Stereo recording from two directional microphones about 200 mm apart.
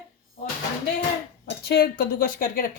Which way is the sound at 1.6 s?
50° left (ahead or behind).